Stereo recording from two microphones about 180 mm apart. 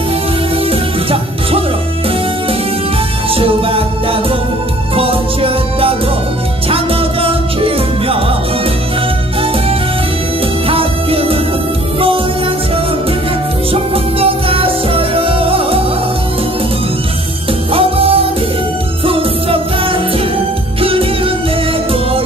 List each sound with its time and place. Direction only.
0.7 s music: 30° right (ahead or behind)
3.3 s music: 30° right (ahead or behind)
10.7 s music: 30° right (ahead or behind)
13.9 s music: 30° right (ahead or behind)
17.7 s music: 30° right (ahead or behind)